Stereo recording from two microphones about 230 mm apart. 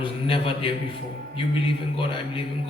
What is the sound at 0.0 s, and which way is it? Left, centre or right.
A man's voice, left.